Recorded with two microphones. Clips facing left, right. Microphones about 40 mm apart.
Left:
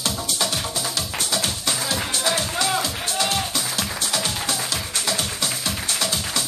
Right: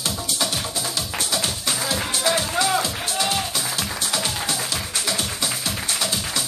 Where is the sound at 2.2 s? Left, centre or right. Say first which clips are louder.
Right 3 dB; centre.